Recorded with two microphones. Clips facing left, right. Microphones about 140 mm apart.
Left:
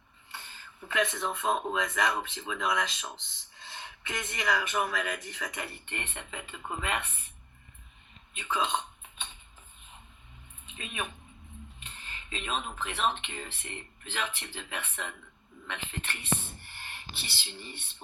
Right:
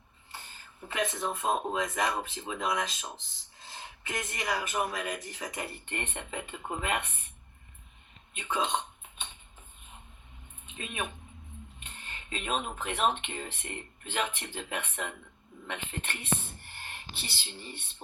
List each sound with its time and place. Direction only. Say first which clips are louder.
0.3 s speech: left 1 dB; 40° right (ahead or behind)
8.4 s speech: even; 50° right (ahead or behind)
10.8 s speech: right 1 dB; 45° right (ahead or behind)